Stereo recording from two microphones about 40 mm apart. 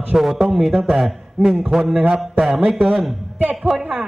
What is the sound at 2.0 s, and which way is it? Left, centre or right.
Mantra, right.